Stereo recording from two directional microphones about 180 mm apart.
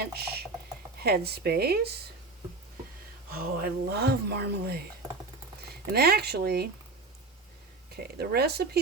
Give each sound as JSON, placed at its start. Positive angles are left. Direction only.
{"t": 0.0, "sound": "a sound", "side_deg": -65}
{"t": 0.9, "sound": "speech", "side_deg": -60}
{"t": 3.3, "sound": "speech", "side_deg": -60}
{"t": 7.9, "sound": "speech", "side_deg": -60}